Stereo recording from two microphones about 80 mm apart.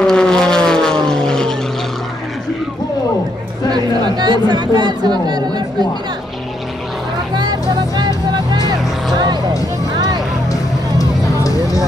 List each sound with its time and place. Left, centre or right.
0.0 s vehicle: centre
3.7 s chatter: right
7.3 s music: right
10.5 s music: left